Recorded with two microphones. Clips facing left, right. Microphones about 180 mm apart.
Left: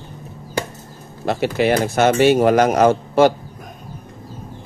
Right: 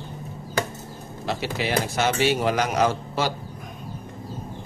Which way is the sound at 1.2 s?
55° left (ahead or behind).